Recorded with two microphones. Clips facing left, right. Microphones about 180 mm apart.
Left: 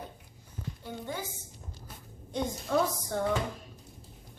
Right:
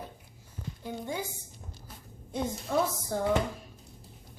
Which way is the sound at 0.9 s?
15° right (ahead or behind).